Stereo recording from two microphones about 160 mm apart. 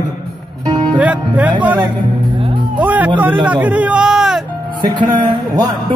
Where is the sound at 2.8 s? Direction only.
10° right (ahead or behind).